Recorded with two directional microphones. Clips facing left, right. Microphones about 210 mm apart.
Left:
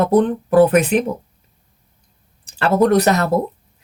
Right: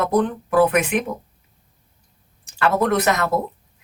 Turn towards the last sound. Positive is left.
turn(degrees=35)  # may be behind; listen again after turning